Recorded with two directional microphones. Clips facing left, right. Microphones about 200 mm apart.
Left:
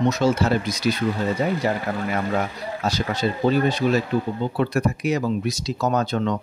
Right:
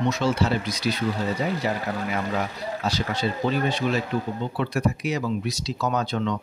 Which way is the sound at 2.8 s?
45° left (ahead or behind).